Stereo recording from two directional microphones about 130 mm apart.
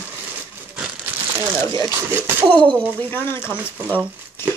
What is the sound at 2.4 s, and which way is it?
Speech, 10° left (ahead or behind).